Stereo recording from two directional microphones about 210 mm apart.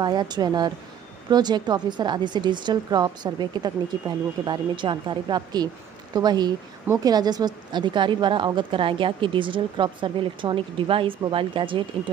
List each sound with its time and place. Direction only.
0.0 s speech: 20° right (ahead or behind)